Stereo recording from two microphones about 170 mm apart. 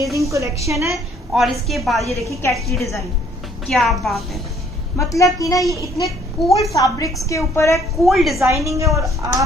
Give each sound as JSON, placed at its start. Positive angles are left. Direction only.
{"t": 0.0, "sound": "a woman's voice", "side_deg": -20}
{"t": 1.3, "sound": "a woman's voice", "side_deg": 0}
{"t": 4.9, "sound": "a woman's voice", "side_deg": 20}
{"t": 8.0, "sound": "a woman's voice", "side_deg": 0}
{"t": 8.5, "sound": "a woman's voice", "side_deg": -20}